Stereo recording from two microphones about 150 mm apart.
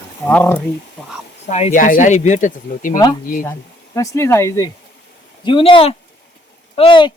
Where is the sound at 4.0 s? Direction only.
20° left (ahead or behind).